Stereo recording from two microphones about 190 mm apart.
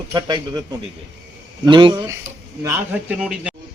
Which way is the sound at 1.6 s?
25° right (ahead or behind).